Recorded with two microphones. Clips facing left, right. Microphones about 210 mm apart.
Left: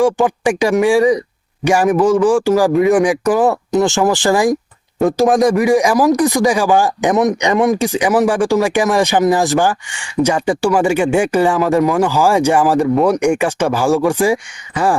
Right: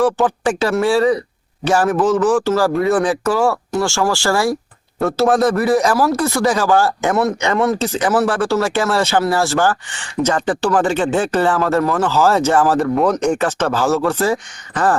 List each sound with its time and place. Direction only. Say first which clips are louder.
0.0 s speech: left 2 dB; 15° left (ahead or behind)